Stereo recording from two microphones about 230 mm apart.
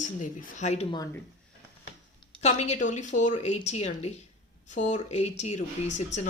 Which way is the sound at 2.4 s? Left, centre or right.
Left.